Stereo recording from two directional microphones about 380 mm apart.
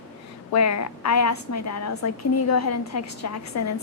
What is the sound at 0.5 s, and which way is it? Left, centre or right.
A woman's voice, left.